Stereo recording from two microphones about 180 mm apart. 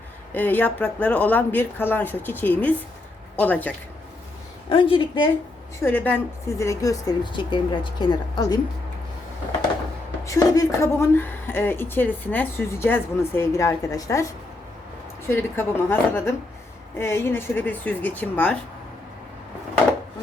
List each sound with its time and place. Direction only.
0.3 s a woman's voice: 10° left (ahead or behind)
4.7 s a woman's voice: 30° left (ahead or behind)
5.8 s a woman's voice: 10° left (ahead or behind)
10.2 s a woman's voice: 20° left (ahead or behind)